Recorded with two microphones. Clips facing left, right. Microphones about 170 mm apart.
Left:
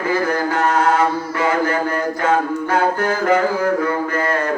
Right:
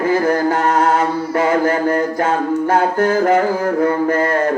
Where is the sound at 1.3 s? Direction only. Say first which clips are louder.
Right 4 dB; 45° right (ahead or behind).